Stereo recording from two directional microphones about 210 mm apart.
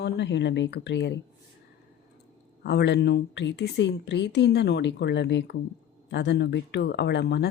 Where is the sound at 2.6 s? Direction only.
50° left (ahead or behind).